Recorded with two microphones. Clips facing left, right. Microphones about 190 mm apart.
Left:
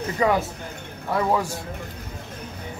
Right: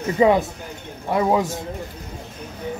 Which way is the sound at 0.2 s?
20° right (ahead or behind).